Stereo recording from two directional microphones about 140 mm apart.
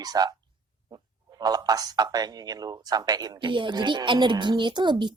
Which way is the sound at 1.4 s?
25° right (ahead or behind).